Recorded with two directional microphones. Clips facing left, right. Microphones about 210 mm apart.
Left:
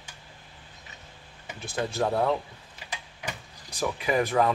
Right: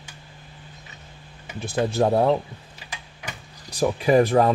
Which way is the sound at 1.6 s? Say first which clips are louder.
Right 7 dB; 25° right (ahead or behind).